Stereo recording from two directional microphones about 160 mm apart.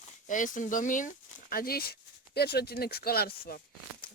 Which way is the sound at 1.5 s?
70° left (ahead or behind).